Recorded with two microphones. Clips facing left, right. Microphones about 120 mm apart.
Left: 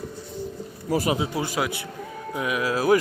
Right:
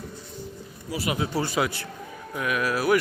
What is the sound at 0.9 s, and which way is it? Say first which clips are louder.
Speech: left 6 dB; 45° left (ahead or behind).